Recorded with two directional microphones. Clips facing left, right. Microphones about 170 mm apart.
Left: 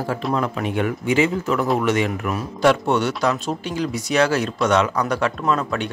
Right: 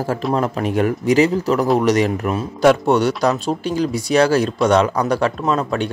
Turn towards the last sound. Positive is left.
turn(degrees=-35)  # may be behind; listen again after turning